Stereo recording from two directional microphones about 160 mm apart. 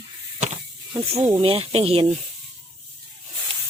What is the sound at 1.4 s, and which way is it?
Speech, 40° right (ahead or behind).